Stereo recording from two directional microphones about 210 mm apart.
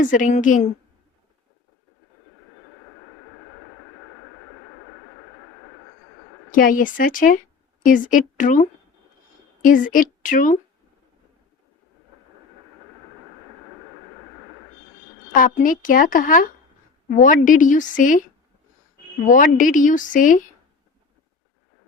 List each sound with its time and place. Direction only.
0.0 s a woman's voice: 40° left (ahead or behind)
6.5 s a woman's voice: 40° left (ahead or behind)
15.3 s a woman's voice: 40° left (ahead or behind)